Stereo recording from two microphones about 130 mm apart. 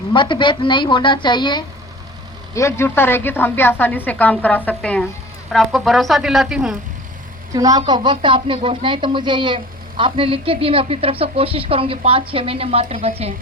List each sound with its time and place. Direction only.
0.1 s a woman's voice: 40° left (ahead or behind)
2.6 s a woman's voice: 20° left (ahead or behind); by 6.7 s 5° right (ahead or behind)
7.5 s a woman's voice: 30° right (ahead or behind); by 13.3 s 50° right (ahead or behind)